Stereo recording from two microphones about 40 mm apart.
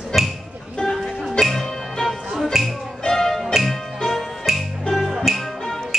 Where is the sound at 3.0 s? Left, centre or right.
Centre.